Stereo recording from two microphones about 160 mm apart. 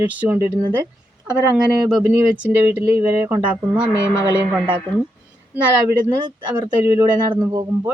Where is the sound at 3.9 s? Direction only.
20° left (ahead or behind).